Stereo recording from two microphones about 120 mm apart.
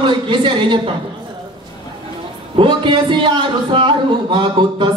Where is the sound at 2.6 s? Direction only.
45° right (ahead or behind).